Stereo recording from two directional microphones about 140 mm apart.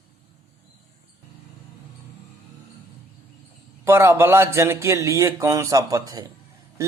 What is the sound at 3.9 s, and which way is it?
Speech, 20° right (ahead or behind).